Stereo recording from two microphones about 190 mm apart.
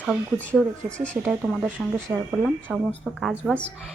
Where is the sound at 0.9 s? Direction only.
5° left (ahead or behind).